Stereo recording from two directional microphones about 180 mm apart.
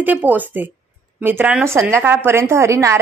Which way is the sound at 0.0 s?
10° right (ahead or behind).